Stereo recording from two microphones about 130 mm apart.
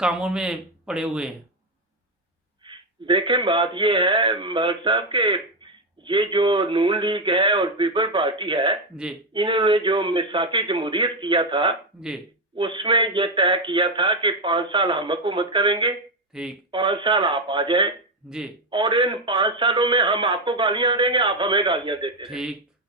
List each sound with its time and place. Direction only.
0.0 s speech: 5° right (ahead or behind)
2.6 s speech: 40° right (ahead or behind)
11.9 s speech: 5° right (ahead or behind)
12.5 s speech: 40° right (ahead or behind)
16.3 s speech: 5° right (ahead or behind)
16.7 s speech: 40° right (ahead or behind)
18.3 s speech: 5° right (ahead or behind)
18.7 s speech: 40° right (ahead or behind)
22.3 s speech: 5° right (ahead or behind)